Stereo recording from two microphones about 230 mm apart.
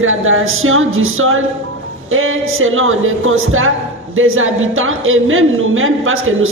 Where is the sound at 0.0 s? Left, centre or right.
Right.